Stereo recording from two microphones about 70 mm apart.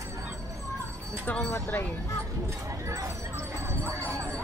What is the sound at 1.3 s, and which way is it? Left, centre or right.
Speech, left.